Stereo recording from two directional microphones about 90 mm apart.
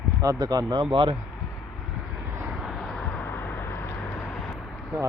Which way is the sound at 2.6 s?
Centre (ahead or behind).